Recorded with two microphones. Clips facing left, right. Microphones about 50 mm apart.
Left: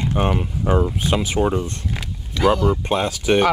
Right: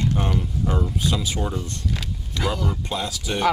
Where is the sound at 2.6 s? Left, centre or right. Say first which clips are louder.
Left 8 dB; left.